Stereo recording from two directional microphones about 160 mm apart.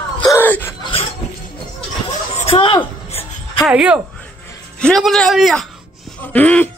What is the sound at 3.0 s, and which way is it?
Music, 40° left (ahead or behind).